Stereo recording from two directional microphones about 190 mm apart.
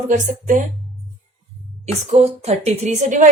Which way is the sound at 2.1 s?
35° right (ahead or behind).